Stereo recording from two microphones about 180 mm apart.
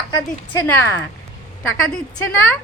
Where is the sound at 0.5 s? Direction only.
10° left (ahead or behind).